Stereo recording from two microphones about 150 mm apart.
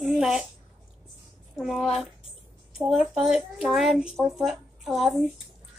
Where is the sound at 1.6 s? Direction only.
5° right (ahead or behind).